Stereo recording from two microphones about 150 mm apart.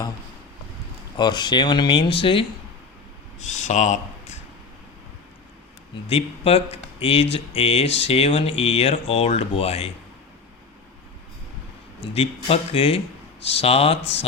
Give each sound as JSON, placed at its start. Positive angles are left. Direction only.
{"t": 1.1, "sound": "speech", "side_deg": 30}
{"t": 3.4, "sound": "speech", "side_deg": 50}
{"t": 6.1, "sound": "speech", "side_deg": 40}
{"t": 12.1, "sound": "speech", "side_deg": 40}